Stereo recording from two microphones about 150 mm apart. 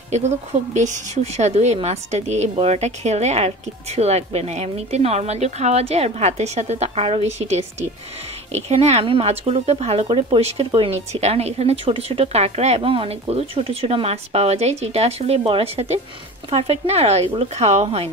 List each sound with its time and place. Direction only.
0.1 s speech: 50° right (ahead or behind)